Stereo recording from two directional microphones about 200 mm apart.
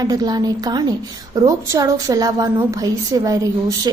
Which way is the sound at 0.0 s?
20° right (ahead or behind).